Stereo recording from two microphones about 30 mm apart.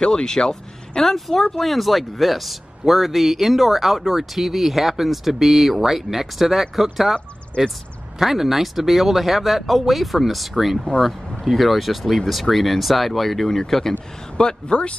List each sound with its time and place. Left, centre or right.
0.0 s speech: left
1.0 s speech: centre
1.6 s speech: centre
8.2 s speech: centre
14.3 s speech: left